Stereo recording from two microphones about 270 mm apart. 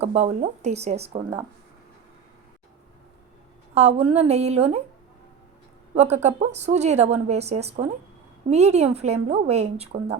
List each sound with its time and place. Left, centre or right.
0.0 s a woman's voice: right
3.8 s a woman's voice: right
5.9 s a woman's voice: right